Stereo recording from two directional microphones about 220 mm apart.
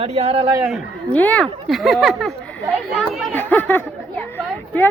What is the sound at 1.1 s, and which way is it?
Speech, 5° left (ahead or behind).